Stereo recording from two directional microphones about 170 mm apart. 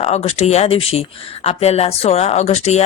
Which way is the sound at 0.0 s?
40° left (ahead or behind).